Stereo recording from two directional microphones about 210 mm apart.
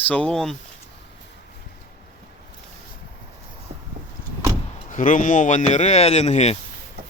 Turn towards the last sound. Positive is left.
turn(degrees=30)  # may be behind; listen again after turning